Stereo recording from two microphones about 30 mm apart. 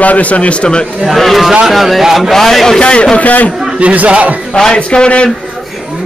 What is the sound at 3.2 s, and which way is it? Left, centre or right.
Speech, left.